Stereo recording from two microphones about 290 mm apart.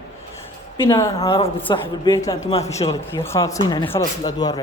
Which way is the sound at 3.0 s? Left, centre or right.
Centre.